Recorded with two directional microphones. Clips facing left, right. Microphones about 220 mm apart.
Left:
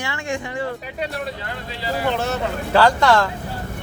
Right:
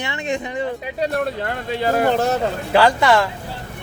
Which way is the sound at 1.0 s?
50° right (ahead or behind).